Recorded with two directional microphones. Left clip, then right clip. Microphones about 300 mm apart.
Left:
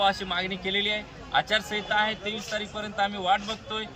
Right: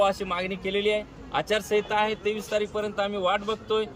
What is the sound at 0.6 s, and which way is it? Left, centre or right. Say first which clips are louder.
A man's voice: right 2 dB; right.